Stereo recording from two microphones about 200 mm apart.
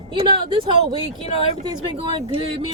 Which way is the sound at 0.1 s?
25° right (ahead or behind).